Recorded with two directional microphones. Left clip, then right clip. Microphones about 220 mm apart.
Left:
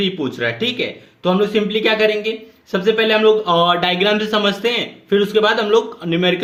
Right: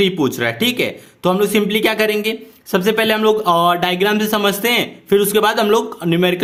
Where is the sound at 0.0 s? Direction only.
40° right (ahead or behind).